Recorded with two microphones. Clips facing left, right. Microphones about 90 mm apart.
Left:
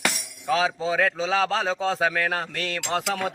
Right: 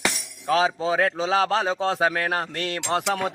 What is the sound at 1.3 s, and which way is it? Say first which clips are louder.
Speech: right 4 dB; 50° right (ahead or behind).